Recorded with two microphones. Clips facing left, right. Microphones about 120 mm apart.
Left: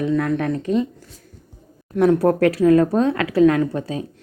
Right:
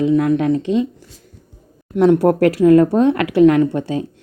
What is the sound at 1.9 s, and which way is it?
A woman's voice, 25° right (ahead or behind).